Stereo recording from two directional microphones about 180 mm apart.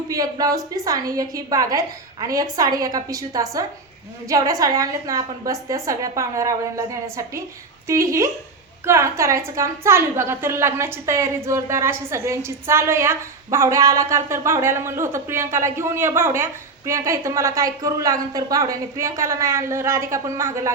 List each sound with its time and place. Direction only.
0.1 s a woman's voice: 20° right (ahead or behind)